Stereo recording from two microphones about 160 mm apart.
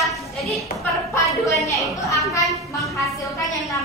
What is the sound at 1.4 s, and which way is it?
A woman's voice, 20° left (ahead or behind).